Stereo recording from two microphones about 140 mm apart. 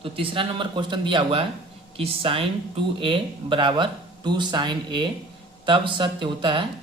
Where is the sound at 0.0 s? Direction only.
40° right (ahead or behind).